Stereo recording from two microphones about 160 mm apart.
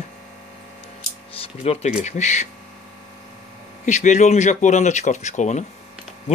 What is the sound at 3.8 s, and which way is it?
Speech, 45° left (ahead or behind).